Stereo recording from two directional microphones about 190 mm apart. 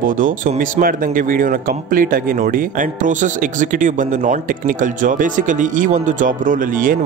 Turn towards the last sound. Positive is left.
turn(degrees=-45)  # may be behind; listen again after turning